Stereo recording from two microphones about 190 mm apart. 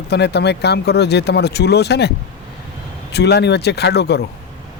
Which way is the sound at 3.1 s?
60° left (ahead or behind).